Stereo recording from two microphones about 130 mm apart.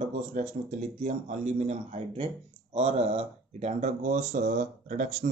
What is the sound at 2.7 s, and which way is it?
Speech, 45° right (ahead or behind).